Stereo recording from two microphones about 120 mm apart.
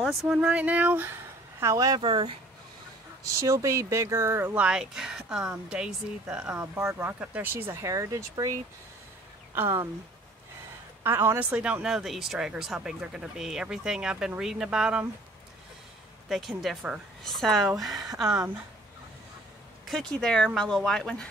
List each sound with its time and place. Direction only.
0.0 s speech: 5° right (ahead or behind); by 2.0 s 25° right (ahead or behind)
2.0 s speech: 45° right (ahead or behind)
3.3 s speech: 25° right (ahead or behind)
11.1 s speech: 20° right (ahead or behind)
16.3 s speech: centre (ahead or behind)
19.9 s speech: 5° left (ahead or behind)